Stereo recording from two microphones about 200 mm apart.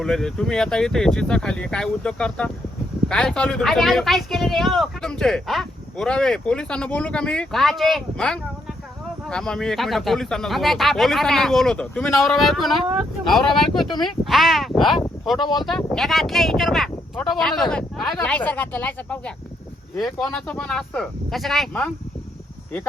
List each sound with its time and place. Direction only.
0.0 s speech: centre (ahead or behind)
15.0 s a sound: centre (ahead or behind)
15.4 s speech: 20° left (ahead or behind)
15.6 s speech: centre (ahead or behind)